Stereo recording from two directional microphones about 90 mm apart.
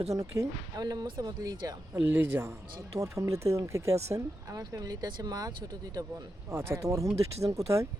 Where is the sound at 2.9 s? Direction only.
35° right (ahead or behind).